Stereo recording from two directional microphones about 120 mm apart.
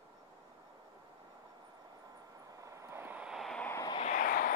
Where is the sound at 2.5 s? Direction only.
25° right (ahead or behind); by 3.6 s centre (ahead or behind).